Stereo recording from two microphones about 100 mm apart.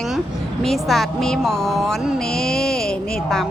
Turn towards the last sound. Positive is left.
turn(degrees=5)  # may be behind; listen again after turning